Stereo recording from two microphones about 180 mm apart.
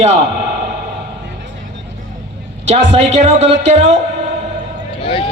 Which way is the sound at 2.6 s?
35° right (ahead or behind).